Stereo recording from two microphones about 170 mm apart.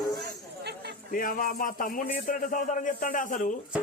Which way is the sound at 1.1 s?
55° left (ahead or behind).